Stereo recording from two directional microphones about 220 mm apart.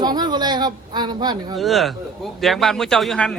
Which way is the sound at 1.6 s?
Centre (ahead or behind).